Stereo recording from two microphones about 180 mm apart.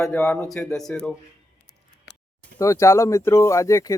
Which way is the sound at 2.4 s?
15° left (ahead or behind).